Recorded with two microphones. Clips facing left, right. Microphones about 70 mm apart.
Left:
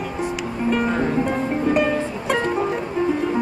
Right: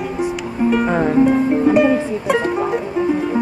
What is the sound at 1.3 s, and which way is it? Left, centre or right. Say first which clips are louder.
Music: right 7 dB; centre.